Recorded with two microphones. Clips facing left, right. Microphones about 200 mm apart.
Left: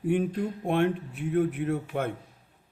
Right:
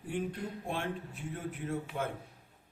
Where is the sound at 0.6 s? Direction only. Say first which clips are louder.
Left 13 dB; 65° left (ahead or behind).